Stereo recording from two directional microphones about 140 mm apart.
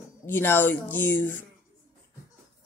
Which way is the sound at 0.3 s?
15° left (ahead or behind).